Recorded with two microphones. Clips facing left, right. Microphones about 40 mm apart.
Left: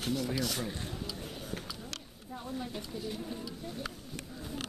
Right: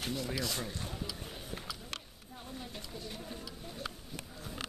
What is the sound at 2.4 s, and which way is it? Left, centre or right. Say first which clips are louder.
Speech: left 6 dB; centre.